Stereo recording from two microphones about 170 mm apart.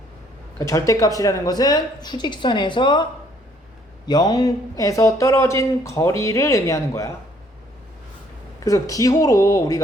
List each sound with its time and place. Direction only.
0.6 s speech: 20° left (ahead or behind)
8.6 s speech: 20° left (ahead or behind)